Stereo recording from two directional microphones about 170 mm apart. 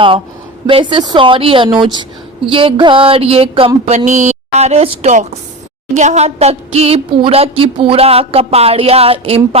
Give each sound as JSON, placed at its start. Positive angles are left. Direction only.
{"t": 0.7, "sound": "a woman's voice", "side_deg": -30}